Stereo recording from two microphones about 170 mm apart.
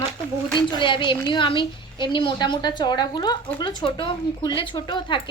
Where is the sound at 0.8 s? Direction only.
30° left (ahead or behind).